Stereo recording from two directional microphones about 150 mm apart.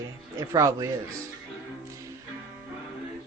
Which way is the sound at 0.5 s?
25° right (ahead or behind).